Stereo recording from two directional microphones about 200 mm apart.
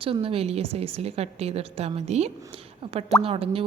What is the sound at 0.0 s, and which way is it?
A woman's voice, 25° right (ahead or behind).